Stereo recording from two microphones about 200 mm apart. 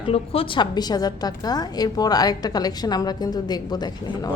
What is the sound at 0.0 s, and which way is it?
A woman's voice, 25° left (ahead or behind).